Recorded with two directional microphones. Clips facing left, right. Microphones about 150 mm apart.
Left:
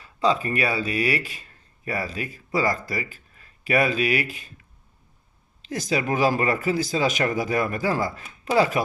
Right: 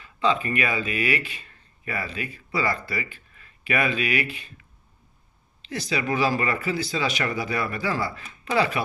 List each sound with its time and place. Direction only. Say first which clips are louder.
0.0 s speech: left 1 dB; 40° left (ahead or behind)
5.6 s speech: left 2 dB; 45° left (ahead or behind)